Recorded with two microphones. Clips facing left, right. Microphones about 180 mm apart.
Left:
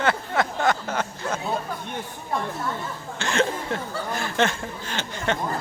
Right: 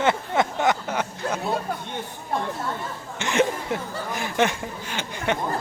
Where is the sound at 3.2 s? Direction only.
20° right (ahead or behind).